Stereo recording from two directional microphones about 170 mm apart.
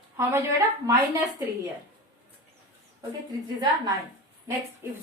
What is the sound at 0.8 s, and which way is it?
Speech, 20° right (ahead or behind).